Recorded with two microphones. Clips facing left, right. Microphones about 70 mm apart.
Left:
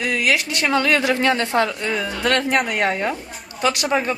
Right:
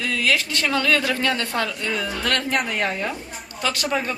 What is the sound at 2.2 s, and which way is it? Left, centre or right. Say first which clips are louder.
Speech: left 6 dB; left.